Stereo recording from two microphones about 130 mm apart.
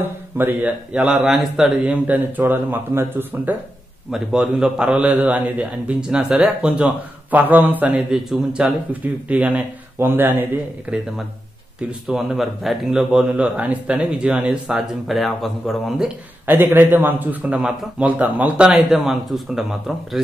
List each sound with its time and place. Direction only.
0.0 s a man's voice: 15° right (ahead or behind)
4.1 s a man's voice: 5° right (ahead or behind)
12.1 s speech: centre (ahead or behind)
16.4 s a man's voice: 15° right (ahead or behind)